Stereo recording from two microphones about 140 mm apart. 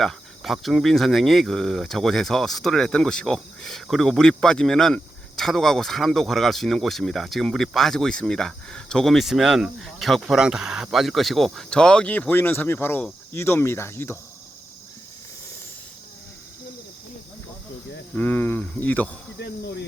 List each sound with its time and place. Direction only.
0.0 s speech: centre (ahead or behind); by 14.2 s 20° left (ahead or behind)
18.1 s speech: 15° left (ahead or behind)